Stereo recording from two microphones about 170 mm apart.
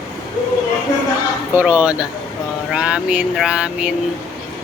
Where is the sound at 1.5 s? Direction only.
10° right (ahead or behind).